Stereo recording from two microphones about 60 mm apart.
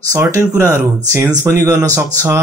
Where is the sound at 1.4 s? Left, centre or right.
Right.